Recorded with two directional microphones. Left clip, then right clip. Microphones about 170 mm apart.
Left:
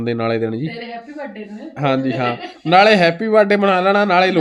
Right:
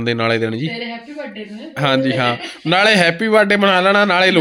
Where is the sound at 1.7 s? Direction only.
Centre (ahead or behind).